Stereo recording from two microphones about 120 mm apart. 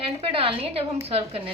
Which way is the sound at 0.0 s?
50° right (ahead or behind).